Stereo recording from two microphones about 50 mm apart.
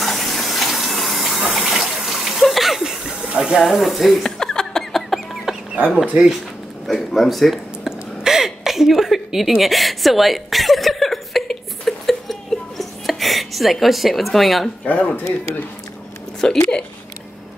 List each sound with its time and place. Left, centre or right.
0.0 s water: centre
2.8 s chuckle: centre
3.3 s speech: centre
4.4 s chicken: centre
6.9 s a sound: centre
9.6 s chuckle: centre
14.9 s speech: left
16.4 s speech: centre